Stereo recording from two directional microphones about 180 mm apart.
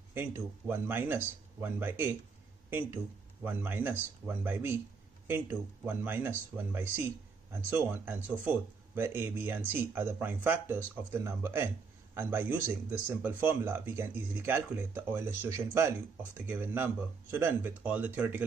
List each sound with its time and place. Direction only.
0.1 s speech: 15° right (ahead or behind)
3.4 s speech: 10° right (ahead or behind)